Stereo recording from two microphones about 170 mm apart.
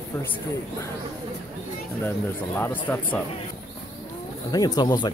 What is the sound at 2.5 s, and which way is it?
Speech, 10° left (ahead or behind).